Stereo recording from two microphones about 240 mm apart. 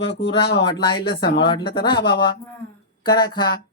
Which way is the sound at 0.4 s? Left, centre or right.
Left.